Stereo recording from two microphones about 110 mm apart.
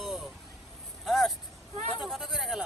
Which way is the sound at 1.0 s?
Centre (ahead or behind).